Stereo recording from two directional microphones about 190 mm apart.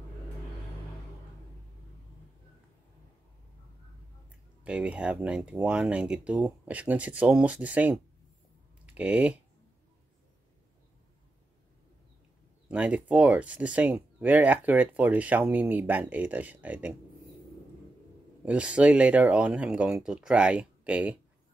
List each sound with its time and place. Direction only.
4.6 s speech: 5° right (ahead or behind)
12.6 s speech: 5° right (ahead or behind)
18.4 s speech: 5° right (ahead or behind)